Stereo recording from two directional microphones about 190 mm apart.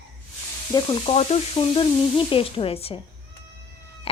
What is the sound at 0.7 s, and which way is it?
Sizzle, 25° left (ahead or behind).